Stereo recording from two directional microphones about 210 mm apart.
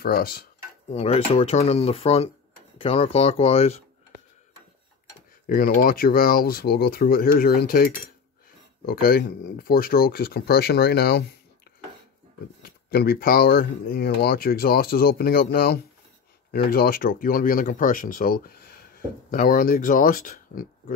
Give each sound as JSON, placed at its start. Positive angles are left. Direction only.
{"t": 0.0, "sound": "speech", "side_deg": 45}
{"t": 0.8, "sound": "speech", "side_deg": 30}
{"t": 5.5, "sound": "speech", "side_deg": 40}
{"t": 12.6, "sound": "speech", "side_deg": 45}